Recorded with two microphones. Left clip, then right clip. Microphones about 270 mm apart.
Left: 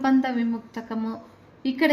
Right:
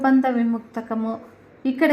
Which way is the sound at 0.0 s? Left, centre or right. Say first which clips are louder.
Right 4 dB; centre.